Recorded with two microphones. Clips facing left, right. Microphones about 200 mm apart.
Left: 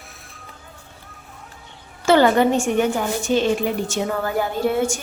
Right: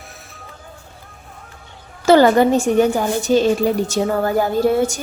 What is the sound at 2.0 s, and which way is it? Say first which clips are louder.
A woman's voice: right 3 dB; 40° right (ahead or behind).